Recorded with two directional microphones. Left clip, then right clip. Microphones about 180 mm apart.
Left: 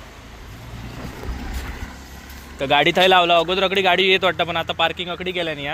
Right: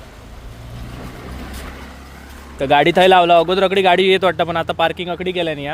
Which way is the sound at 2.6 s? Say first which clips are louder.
Right 4 dB; 35° right (ahead or behind).